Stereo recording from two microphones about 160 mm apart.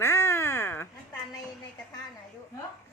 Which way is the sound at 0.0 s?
15° left (ahead or behind).